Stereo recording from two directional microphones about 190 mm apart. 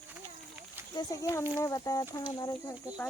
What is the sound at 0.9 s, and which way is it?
Speech, 20° left (ahead or behind).